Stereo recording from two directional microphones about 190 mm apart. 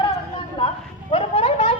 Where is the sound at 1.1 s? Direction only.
30° left (ahead or behind).